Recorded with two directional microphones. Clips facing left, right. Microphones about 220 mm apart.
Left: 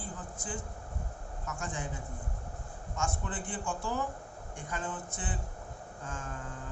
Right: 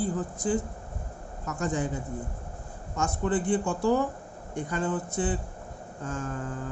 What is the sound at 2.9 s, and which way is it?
Speech, 40° right (ahead or behind).